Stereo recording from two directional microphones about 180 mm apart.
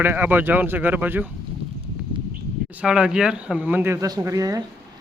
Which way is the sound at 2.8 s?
5° right (ahead or behind).